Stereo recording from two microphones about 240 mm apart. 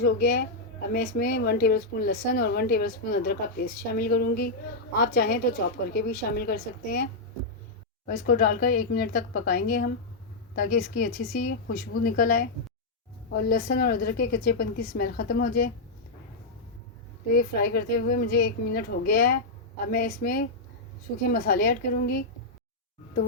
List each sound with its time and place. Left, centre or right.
0.0 s a woman's voice: left
17.3 s a woman's voice: left